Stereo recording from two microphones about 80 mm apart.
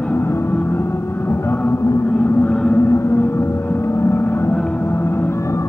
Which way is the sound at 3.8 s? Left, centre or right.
Left.